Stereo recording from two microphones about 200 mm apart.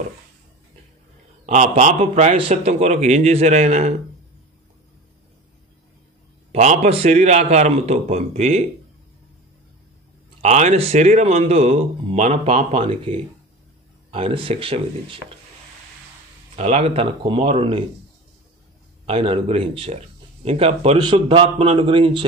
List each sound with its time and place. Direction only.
1.4 s speech: 35° right (ahead or behind)
6.5 s speech: 35° right (ahead or behind)
10.4 s speech: 35° right (ahead or behind)
16.5 s speech: 30° right (ahead or behind)
19.0 s speech: 30° right (ahead or behind)